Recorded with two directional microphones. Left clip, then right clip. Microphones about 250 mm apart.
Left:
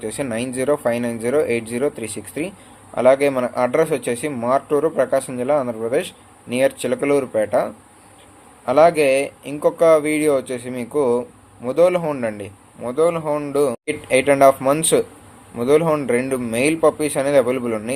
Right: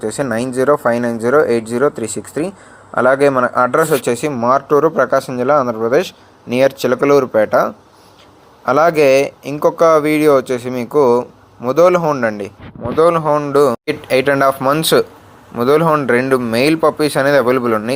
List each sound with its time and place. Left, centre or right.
0.1 s speech: centre